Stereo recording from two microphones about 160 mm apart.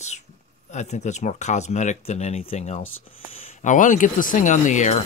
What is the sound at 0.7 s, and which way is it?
Speech, 45° left (ahead or behind).